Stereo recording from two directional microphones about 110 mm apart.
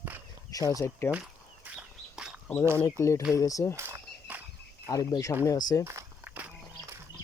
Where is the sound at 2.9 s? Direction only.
25° left (ahead or behind).